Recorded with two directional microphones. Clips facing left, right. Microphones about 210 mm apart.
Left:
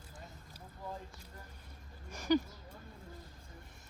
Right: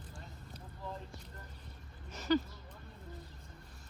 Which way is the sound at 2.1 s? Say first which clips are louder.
Left 1 dB; 15° left (ahead or behind).